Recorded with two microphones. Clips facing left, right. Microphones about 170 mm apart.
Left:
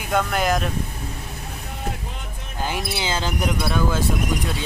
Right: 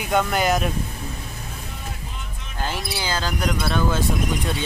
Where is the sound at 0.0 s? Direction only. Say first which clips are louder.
Right 1 dB; centre (ahead or behind).